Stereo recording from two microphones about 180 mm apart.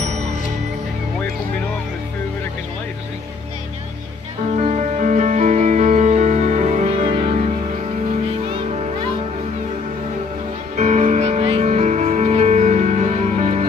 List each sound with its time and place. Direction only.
0.0 s music: 40° right (ahead or behind)
4.6 s music: 40° right (ahead or behind)
10.8 s music: 40° right (ahead or behind)